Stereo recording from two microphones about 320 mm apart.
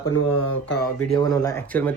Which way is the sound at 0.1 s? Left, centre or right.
Left.